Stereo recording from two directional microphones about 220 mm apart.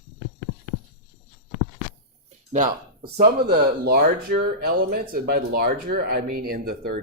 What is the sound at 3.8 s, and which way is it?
Speech, 45° right (ahead or behind).